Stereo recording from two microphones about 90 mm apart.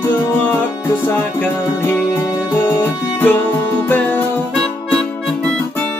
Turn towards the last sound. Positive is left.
turn(degrees=20)  # may be behind; listen again after turning